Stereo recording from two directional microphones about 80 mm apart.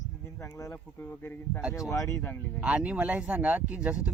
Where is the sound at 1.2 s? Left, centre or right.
Left.